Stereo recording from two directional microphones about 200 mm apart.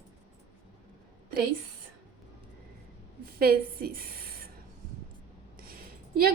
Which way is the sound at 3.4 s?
50° right (ahead or behind).